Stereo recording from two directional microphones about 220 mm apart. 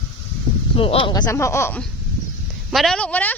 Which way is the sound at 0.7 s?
25° left (ahead or behind).